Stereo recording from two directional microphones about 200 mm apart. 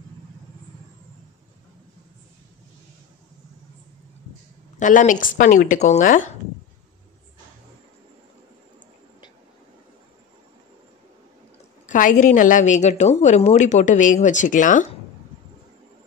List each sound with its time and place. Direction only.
4.7 s a woman's voice: 40° left (ahead or behind)
11.8 s a woman's voice: 40° left (ahead or behind)